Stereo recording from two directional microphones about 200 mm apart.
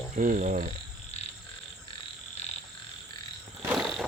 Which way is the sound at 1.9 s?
35° left (ahead or behind).